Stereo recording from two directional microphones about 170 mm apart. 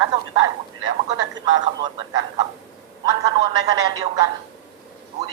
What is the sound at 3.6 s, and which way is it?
Speech, 25° right (ahead or behind).